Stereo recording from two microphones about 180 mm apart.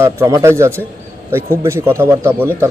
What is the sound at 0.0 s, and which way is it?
Speech, 15° right (ahead or behind).